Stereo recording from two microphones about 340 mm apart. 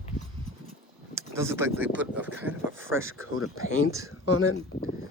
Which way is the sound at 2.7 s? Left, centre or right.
Right.